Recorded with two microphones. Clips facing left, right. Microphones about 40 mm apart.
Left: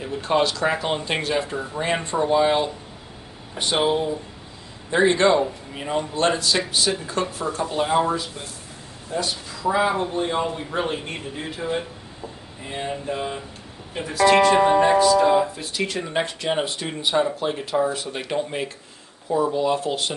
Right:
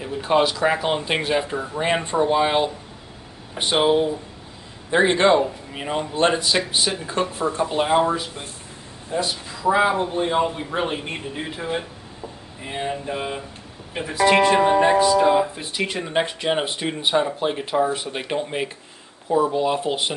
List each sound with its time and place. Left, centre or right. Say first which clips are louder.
0.0 s speech: right 2 dB; centre
15.0 s speech: even; centre